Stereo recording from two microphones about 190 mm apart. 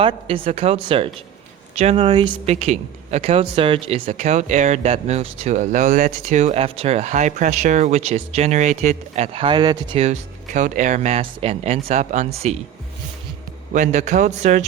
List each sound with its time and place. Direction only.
0.0 s speech: 25° right (ahead or behind)
10.0 s speech: 40° right (ahead or behind)
13.7 s speech: 40° right (ahead or behind)